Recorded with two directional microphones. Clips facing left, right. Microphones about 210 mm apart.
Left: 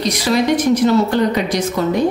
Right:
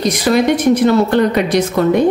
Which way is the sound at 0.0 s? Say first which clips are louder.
Right 3 dB; 50° right (ahead or behind).